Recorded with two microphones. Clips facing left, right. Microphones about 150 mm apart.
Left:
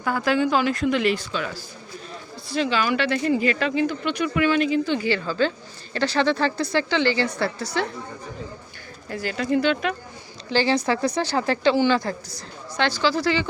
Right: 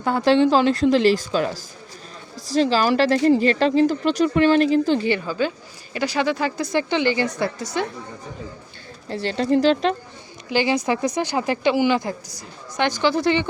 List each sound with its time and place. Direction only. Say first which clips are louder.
0.0 s speech: right 5 dB; 30° right (ahead or behind)
5.0 s a woman's voice: right 1 dB; 15° right (ahead or behind)
9.0 s speech: right 4 dB; 30° right (ahead or behind)
10.5 s a woman's voice: right 1 dB; 15° right (ahead or behind)